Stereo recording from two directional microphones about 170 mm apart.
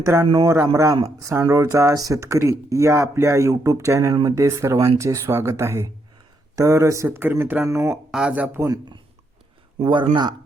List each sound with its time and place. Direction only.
0.3 s speech: 20° right (ahead or behind)
9.7 s speech: 30° right (ahead or behind)